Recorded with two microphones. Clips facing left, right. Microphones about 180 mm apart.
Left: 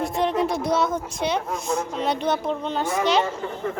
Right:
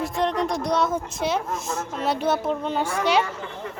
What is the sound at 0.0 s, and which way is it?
Speech, 5° left (ahead or behind).